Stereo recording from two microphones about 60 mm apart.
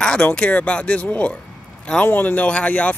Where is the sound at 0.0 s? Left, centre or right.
Centre.